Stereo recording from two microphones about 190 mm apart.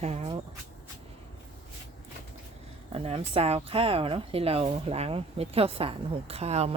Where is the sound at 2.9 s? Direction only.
30° right (ahead or behind).